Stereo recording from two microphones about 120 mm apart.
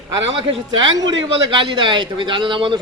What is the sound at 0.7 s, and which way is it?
A man's voice, 35° right (ahead or behind).